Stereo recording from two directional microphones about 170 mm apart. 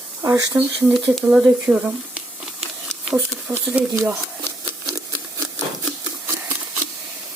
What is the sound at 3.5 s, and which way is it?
Speech, 15° right (ahead or behind).